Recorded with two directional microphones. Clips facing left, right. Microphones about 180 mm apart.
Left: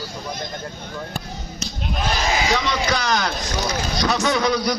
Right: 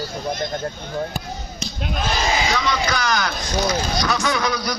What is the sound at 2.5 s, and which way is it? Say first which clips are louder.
Speech: even; 25° left (ahead or behind).